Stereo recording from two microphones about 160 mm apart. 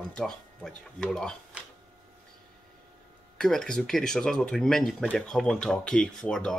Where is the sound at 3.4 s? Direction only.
5° left (ahead or behind).